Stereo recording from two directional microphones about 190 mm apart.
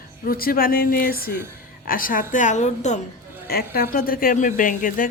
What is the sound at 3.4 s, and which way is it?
Speech, 50° left (ahead or behind).